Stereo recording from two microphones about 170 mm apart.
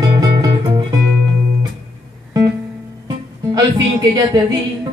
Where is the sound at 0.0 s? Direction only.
25° right (ahead or behind).